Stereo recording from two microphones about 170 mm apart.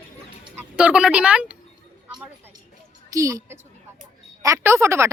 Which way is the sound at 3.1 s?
20° right (ahead or behind).